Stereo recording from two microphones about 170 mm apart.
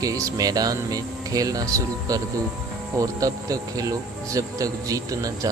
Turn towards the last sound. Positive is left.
turn(degrees=-20)  # may be behind; listen again after turning